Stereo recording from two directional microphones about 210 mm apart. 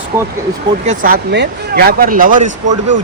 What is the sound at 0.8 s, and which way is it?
Speech, 35° right (ahead or behind).